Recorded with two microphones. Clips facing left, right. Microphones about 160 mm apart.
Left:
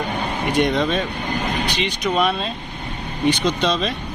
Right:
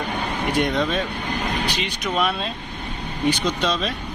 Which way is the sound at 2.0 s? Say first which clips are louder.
Left 3 dB; centre (ahead or behind).